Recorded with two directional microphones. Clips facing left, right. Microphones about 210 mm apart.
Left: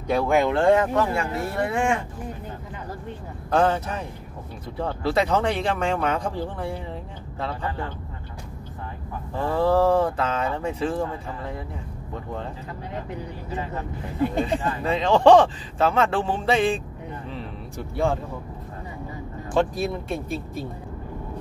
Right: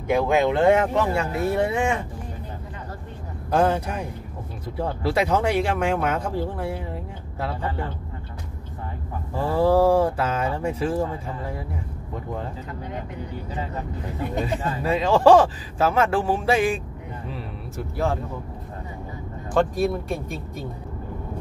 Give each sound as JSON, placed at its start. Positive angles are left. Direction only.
{"t": 0.1, "sound": "speech", "side_deg": -20}
{"t": 3.4, "sound": "speech", "side_deg": -10}
{"t": 9.3, "sound": "speech", "side_deg": -10}
{"t": 14.4, "sound": "speech", "side_deg": -10}
{"t": 17.3, "sound": "a sound", "side_deg": -5}
{"t": 19.5, "sound": "speech", "side_deg": 0}